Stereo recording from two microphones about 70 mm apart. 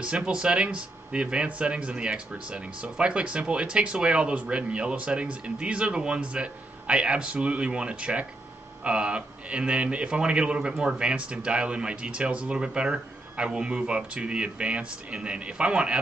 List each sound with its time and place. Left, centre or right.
0.0 s speech: centre